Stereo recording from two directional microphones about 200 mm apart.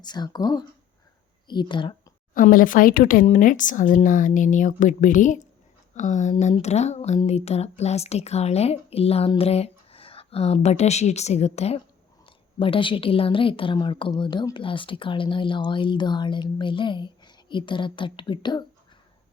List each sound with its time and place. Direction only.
0.0 s a woman's voice: 20° left (ahead or behind)
2.3 s a woman's voice: 45° left (ahead or behind); by 18.6 s 25° left (ahead or behind)